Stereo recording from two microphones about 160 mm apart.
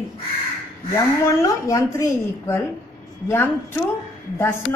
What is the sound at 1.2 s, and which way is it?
A woman's voice, 20° left (ahead or behind).